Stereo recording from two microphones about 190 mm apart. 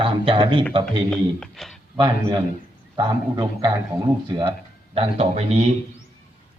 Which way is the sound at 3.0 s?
20° right (ahead or behind).